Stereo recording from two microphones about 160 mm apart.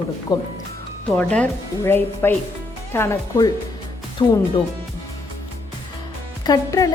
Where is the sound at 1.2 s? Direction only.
10° left (ahead or behind).